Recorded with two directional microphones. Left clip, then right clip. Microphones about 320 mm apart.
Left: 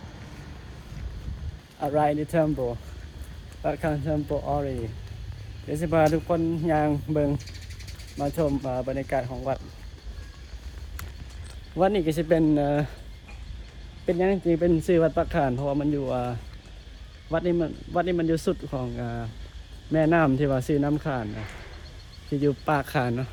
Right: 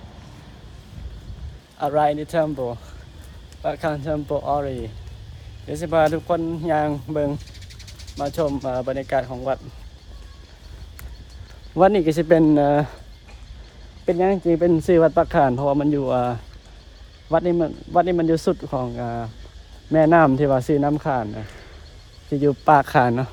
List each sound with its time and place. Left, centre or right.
1.8 s speech: centre; by 9.6 s right
11.8 s speech: right
14.0 s speech: right
17.2 s speech: centre
22.3 s speech: centre